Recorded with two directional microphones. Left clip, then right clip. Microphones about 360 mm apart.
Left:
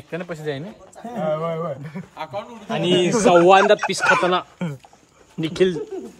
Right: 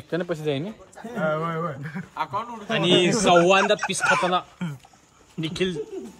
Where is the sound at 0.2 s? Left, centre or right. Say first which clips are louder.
Right 1 dB; right.